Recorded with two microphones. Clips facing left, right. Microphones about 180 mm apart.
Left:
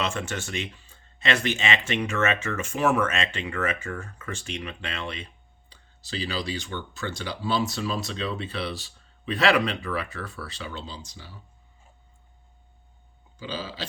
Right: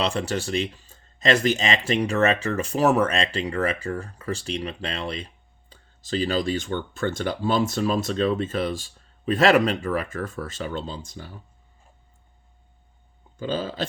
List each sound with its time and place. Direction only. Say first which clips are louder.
0.0 s speech: right 5 dB; 35° right (ahead or behind); by 11.3 s 50° right (ahead or behind)
13.4 s speech: right 7 dB; 50° right (ahead or behind)